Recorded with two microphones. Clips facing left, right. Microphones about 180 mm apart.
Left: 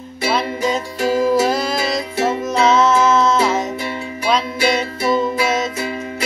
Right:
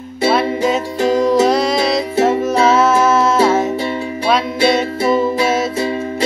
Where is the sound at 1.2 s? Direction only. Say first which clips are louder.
Right 3 dB; 5° left (ahead or behind).